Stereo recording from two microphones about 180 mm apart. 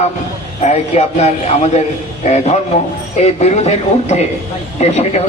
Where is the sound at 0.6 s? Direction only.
35° left (ahead or behind).